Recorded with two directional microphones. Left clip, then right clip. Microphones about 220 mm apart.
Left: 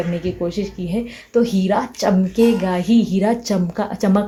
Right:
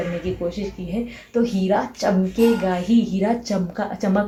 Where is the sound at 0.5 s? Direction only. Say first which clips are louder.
Left 4 dB; 45° left (ahead or behind).